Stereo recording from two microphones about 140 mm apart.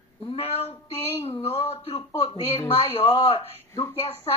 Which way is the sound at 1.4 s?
45° left (ahead or behind).